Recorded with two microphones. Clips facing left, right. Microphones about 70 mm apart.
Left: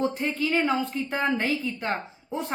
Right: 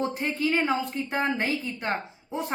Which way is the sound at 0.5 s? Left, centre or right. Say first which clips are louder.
Left 1 dB; right.